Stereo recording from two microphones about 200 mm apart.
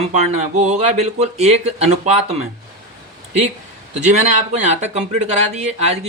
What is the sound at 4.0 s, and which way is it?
Speech, 35° right (ahead or behind).